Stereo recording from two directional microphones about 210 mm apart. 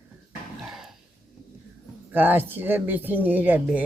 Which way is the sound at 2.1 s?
10° right (ahead or behind).